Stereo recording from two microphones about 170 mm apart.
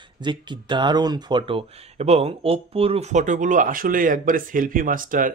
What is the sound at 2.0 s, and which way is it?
Speech, 40° right (ahead or behind).